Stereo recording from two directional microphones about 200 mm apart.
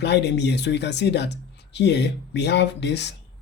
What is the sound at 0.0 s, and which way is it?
Speech, 60° left (ahead or behind).